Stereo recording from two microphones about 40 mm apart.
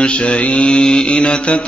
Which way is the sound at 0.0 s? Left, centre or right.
Left.